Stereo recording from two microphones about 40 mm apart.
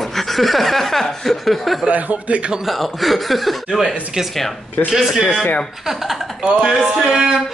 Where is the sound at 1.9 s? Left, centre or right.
Right.